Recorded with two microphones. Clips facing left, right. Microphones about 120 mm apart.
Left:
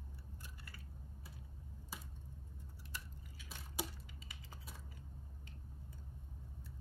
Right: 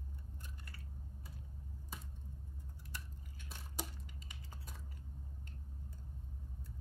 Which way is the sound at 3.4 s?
5° left (ahead or behind).